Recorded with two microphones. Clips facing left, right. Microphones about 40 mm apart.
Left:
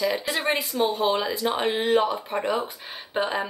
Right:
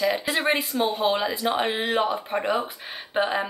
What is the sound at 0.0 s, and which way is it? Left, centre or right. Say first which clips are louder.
Speech: right 2 dB; centre.